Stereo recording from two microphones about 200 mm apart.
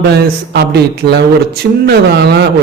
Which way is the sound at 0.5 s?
55° right (ahead or behind).